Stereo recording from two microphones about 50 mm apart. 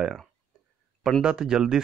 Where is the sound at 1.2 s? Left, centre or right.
Centre.